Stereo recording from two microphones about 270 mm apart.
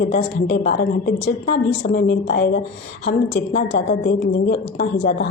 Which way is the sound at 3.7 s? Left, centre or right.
Left.